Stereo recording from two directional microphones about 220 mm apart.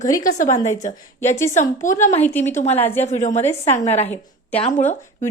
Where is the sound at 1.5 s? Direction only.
35° left (ahead or behind).